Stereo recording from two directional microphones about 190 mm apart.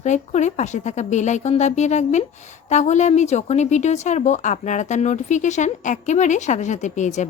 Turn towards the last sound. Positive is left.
turn(degrees=40)  # may be behind; listen again after turning